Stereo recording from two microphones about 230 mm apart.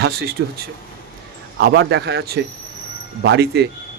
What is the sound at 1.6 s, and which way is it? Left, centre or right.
Speech, right.